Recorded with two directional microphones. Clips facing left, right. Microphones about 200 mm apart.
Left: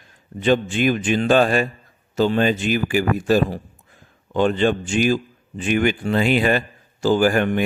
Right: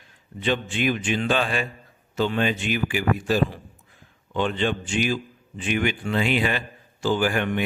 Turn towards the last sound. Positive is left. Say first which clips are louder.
# left 6 dB
turn(degrees=40)  # may be behind; listen again after turning